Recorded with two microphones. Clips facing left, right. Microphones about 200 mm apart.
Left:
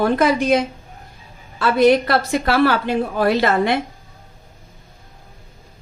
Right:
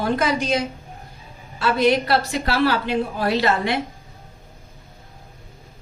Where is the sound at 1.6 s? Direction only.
50° left (ahead or behind).